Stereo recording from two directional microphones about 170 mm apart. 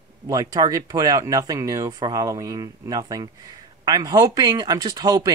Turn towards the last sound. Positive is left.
turn(degrees=-25)  # may be behind; listen again after turning